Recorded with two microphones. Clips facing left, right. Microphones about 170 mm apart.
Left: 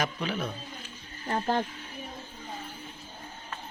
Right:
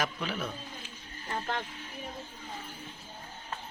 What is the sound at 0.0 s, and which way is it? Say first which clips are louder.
Speech: left 3 dB; centre (ahead or behind).